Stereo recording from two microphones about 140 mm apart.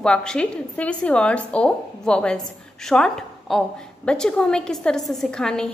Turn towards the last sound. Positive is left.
turn(degrees=5)  # may be behind; listen again after turning